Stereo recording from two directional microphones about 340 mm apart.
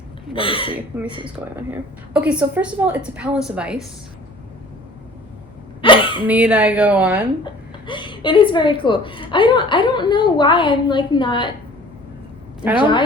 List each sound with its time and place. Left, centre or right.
0.3 s a woman's voice: centre
0.8 s a woman's voice: centre
5.8 s a sound: centre
6.2 s a woman's voice: centre
7.9 s a woman's voice: centre